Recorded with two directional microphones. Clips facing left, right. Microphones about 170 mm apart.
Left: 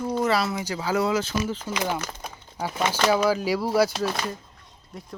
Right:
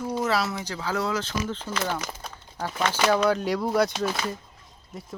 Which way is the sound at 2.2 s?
10° left (ahead or behind).